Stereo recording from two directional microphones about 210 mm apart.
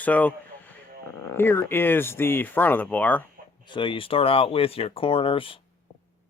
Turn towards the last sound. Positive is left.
turn(degrees=25)  # may be behind; listen again after turning